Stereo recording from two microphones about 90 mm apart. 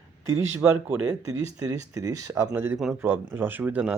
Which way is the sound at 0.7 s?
20° right (ahead or behind).